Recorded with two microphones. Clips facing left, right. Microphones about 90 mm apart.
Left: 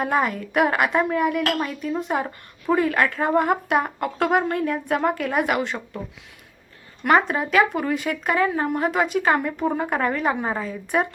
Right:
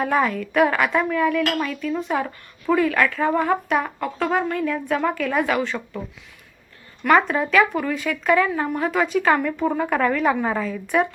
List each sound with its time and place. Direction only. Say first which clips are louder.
0.0 s a woman's voice: right 1 dB; 30° left (ahead or behind)
3.7 s a woman's voice: even; 35° left (ahead or behind)
4.0 s a woman's voice: left 1 dB; 55° left (ahead or behind)
4.4 s a woman's voice: even; 40° left (ahead or behind)
5.3 s a woman's voice: right 1 dB; 25° left (ahead or behind)
7.0 s a woman's voice: right 1 dB; 25° left (ahead or behind)